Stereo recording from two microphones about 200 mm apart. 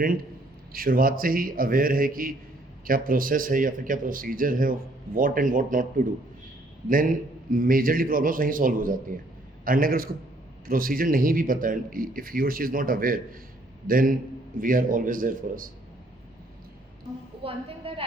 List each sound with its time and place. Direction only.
0.7 s speech: 45° right (ahead or behind)
17.4 s a woman's voice: 30° right (ahead or behind)